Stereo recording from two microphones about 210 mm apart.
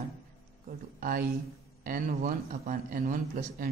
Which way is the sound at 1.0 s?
45° right (ahead or behind).